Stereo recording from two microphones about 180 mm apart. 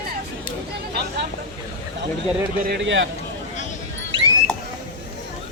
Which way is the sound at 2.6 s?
80° right.